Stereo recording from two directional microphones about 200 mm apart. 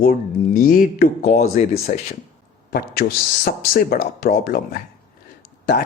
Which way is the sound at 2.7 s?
50° left (ahead or behind).